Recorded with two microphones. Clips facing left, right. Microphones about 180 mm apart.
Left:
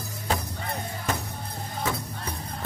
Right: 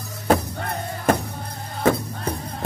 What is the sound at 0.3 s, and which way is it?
Music, 55° right (ahead or behind).